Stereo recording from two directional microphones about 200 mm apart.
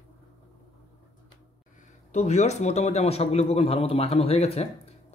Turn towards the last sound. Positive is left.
turn(degrees=30)  # may be behind; listen again after turning